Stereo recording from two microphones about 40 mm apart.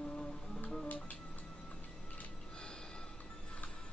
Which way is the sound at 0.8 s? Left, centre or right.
Left.